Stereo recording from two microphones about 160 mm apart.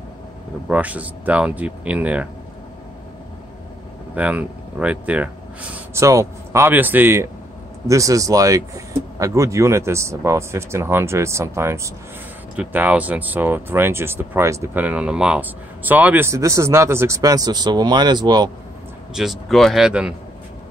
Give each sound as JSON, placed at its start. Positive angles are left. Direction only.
{"t": 0.7, "sound": "speech", "side_deg": -10}
{"t": 4.1, "sound": "speech", "side_deg": -10}
{"t": 19.1, "sound": "speech", "side_deg": 0}